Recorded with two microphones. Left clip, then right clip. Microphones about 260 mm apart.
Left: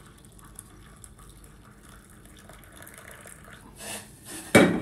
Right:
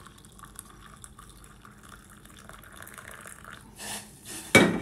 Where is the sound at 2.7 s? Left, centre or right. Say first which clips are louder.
Right 2 dB; centre.